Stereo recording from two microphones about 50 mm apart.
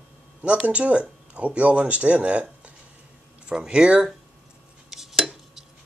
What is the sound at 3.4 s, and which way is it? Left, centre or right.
Speech, centre.